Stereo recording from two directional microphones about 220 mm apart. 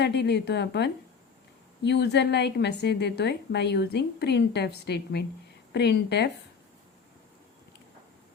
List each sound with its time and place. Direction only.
0.0 s a woman's voice: 50° left (ahead or behind)